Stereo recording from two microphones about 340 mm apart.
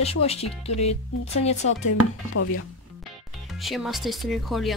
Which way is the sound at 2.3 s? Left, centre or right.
Left.